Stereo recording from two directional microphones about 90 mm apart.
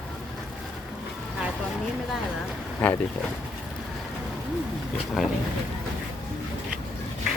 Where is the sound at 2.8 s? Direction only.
15° left (ahead or behind).